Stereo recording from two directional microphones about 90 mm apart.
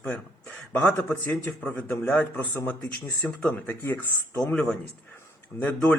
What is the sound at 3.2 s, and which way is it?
A man's voice, 15° left (ahead or behind).